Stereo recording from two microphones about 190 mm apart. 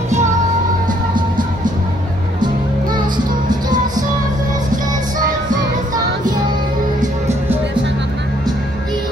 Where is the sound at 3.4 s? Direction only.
20° right (ahead or behind).